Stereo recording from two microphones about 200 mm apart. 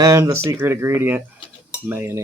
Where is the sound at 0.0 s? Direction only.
15° right (ahead or behind).